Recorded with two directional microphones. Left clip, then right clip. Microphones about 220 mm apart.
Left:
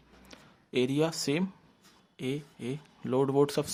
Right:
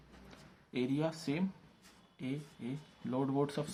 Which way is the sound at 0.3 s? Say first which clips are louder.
Left 9 dB; 50° left (ahead or behind).